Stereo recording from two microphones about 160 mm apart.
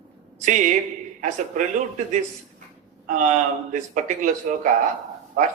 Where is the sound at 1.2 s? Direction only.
50° right (ahead or behind).